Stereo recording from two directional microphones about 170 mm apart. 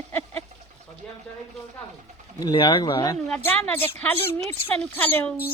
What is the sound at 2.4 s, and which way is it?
Speech, 25° left (ahead or behind).